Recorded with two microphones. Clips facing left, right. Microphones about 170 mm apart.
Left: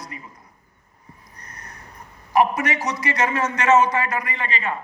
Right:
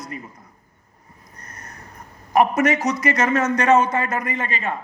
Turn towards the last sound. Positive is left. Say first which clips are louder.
# right 2 dB
turn(degrees=-50)  # may be behind; listen again after turning